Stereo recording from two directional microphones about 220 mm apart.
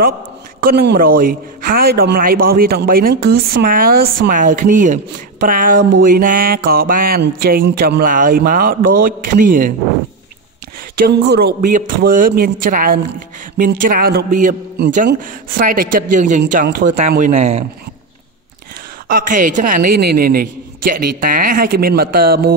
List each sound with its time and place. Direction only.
0.6 s a man's voice: 45° right (ahead or behind)
11.1 s a man's voice: 45° right (ahead or behind); by 17.6 s 30° right (ahead or behind)
19.0 s a man's voice: 40° right (ahead or behind)